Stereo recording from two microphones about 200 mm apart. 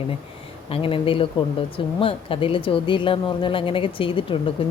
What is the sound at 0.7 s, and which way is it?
Speech, 25° left (ahead or behind).